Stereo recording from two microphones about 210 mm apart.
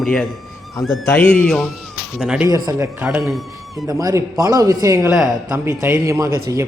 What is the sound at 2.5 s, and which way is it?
Speech, 15° right (ahead or behind).